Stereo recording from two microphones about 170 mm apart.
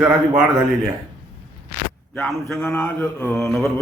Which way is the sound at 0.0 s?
5° right (ahead or behind).